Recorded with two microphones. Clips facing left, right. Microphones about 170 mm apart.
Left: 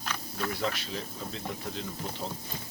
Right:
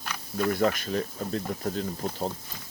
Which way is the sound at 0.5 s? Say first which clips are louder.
Right 9 dB; 50° right (ahead or behind).